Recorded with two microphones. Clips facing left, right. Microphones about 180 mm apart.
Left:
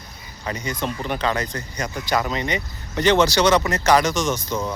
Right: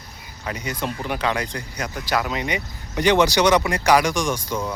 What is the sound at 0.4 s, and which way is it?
Speech, 10° right (ahead or behind).